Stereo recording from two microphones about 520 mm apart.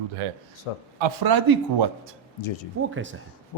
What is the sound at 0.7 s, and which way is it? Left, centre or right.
Speech, left.